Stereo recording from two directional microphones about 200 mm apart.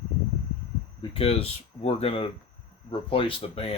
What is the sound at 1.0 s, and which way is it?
Speech, 30° left (ahead or behind).